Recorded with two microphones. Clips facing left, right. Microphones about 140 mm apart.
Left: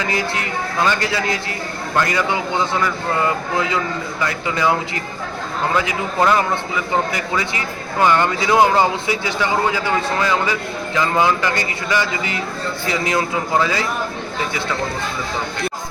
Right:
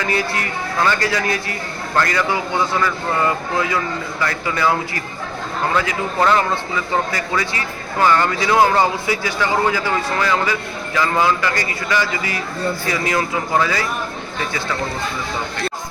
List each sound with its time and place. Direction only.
0.1 s a man's voice: 20° left (ahead or behind)